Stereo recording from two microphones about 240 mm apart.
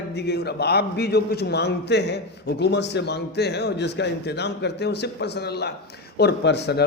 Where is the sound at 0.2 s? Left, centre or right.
Left.